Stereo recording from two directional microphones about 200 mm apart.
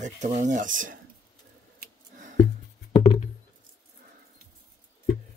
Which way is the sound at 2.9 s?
30° left (ahead or behind).